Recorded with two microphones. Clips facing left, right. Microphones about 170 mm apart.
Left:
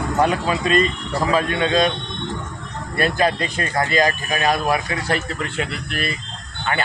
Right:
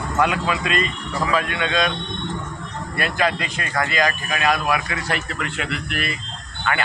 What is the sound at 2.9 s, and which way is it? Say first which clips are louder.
A man's voice: left 3 dB; 35° left (ahead or behind).